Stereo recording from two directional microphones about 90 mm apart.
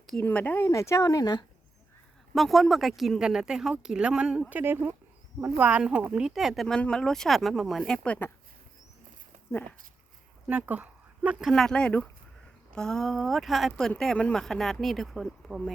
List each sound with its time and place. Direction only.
0.2 s speech: 20° left (ahead or behind)
0.6 s speech: 35° left (ahead or behind); by 1.5 s 50° left (ahead or behind)
2.3 s speech: centre (ahead or behind)
4.5 s speech: 20° right (ahead or behind); by 8.3 s 15° left (ahead or behind)
9.5 s speech: 20° left (ahead or behind)
10.4 s speech: 15° right (ahead or behind)
11.4 s speech: 5° left (ahead or behind)